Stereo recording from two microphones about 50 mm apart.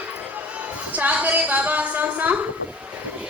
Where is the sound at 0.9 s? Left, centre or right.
Right.